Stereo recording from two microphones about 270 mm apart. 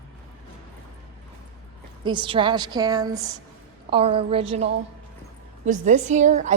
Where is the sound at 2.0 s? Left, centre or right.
Centre.